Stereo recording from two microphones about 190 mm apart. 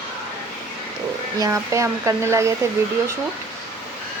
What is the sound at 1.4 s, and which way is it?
Speech, 15° right (ahead or behind).